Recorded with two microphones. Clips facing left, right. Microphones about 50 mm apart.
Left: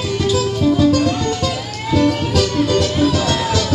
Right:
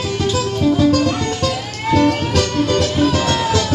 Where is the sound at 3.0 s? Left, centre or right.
Right.